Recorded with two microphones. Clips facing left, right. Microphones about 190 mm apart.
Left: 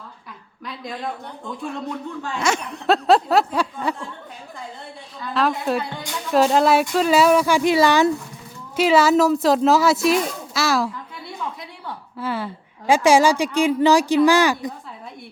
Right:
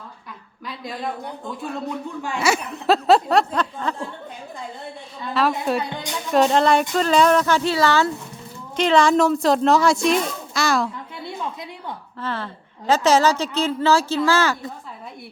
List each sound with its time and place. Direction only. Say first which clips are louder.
0.7 s speech: right 1 dB; centre (ahead or behind)
5.3 s speech: even; centre (ahead or behind)
5.9 s a woman's voice: right 2 dB; 20° right (ahead or behind)
6.3 s speech: left 1 dB; centre (ahead or behind)
12.2 s speech: left 3 dB; 10° left (ahead or behind)